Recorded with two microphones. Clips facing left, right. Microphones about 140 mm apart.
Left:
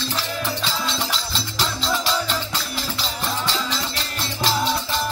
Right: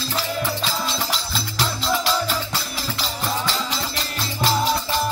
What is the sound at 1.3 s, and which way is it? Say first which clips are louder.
Music: right 1 dB; 5° right (ahead or behind).